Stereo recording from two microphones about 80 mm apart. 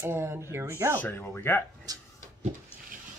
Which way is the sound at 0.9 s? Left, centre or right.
Left.